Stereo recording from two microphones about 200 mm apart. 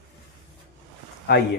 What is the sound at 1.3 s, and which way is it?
Speech, 55° left (ahead or behind).